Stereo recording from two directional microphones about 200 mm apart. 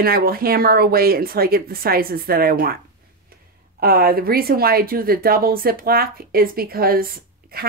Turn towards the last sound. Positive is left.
turn(degrees=-50)  # may be behind; listen again after turning